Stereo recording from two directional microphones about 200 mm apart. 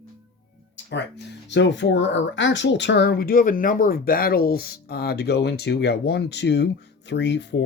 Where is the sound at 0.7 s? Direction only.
60° left (ahead or behind).